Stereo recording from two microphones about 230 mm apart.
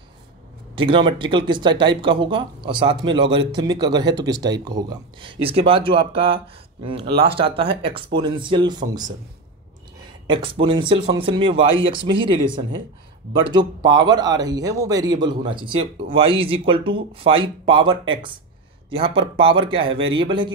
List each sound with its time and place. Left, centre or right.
0.7 s speech: right
10.2 s speech: right